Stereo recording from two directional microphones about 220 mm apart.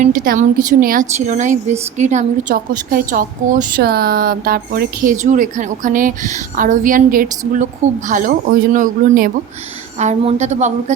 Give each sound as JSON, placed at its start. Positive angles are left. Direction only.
{"t": 0.0, "sound": "a woman's voice", "side_deg": -35}